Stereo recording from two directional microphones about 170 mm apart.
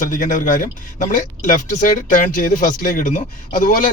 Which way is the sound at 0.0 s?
50° left (ahead or behind).